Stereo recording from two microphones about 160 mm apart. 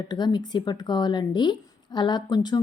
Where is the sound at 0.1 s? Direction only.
25° left (ahead or behind).